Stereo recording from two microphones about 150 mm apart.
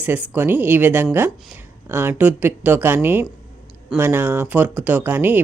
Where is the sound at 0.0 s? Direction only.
15° right (ahead or behind).